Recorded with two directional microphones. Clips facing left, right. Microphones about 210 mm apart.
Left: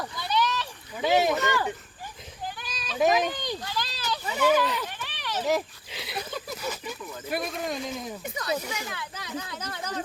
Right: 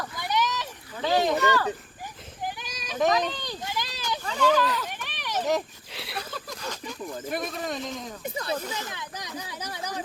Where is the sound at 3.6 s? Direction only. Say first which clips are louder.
Even; 20° right (ahead or behind).